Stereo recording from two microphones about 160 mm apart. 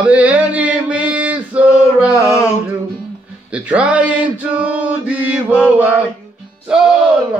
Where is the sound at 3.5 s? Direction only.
5° right (ahead or behind).